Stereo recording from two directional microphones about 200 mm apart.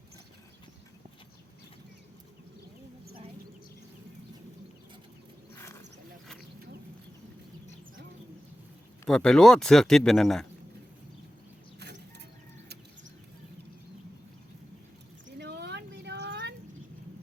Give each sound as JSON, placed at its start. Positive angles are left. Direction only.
{"t": 5.5, "sound": "wild animals", "side_deg": 15}
{"t": 9.0, "sound": "speech", "side_deg": 5}
{"t": 11.8, "sound": "a sound", "side_deg": -60}
{"t": 15.4, "sound": "vehicle", "side_deg": -55}